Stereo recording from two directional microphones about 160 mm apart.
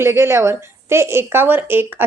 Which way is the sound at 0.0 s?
15° right (ahead or behind).